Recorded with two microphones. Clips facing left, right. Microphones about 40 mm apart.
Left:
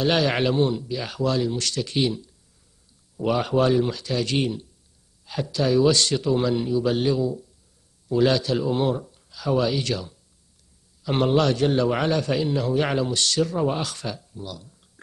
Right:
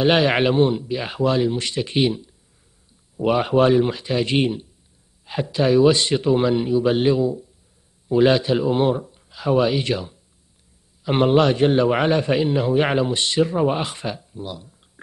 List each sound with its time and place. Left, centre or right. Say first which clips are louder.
0.0 s a man's voice: right 4 dB; right